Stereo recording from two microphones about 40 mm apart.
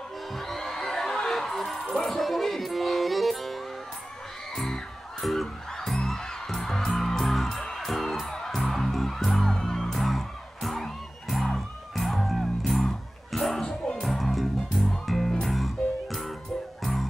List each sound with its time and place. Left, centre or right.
0.3 s music: centre
4.6 s music: centre
5.2 s a sound: centre
5.9 s music: centre
13.7 s music: centre
14.0 s music: centre